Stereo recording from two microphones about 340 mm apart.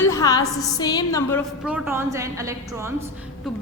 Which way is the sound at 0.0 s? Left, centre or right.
Centre.